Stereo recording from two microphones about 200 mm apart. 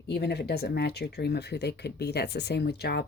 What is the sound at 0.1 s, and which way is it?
Speech, 55° left (ahead or behind).